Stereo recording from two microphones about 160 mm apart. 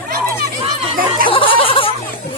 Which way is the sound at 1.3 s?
35° left (ahead or behind).